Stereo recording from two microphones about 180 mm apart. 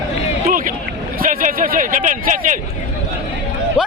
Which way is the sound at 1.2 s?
50° right (ahead or behind).